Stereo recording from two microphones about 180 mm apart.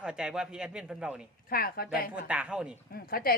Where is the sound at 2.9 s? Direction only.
55° left (ahead or behind).